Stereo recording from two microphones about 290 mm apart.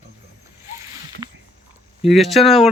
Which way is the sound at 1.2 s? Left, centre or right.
Centre.